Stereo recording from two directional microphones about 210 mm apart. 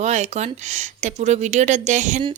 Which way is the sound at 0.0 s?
35° right (ahead or behind).